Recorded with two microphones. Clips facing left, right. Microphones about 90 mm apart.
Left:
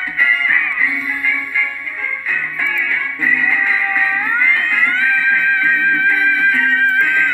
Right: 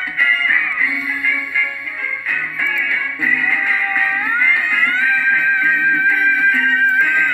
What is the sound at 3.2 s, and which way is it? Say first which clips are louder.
Music: left 2 dB; centre (ahead or behind).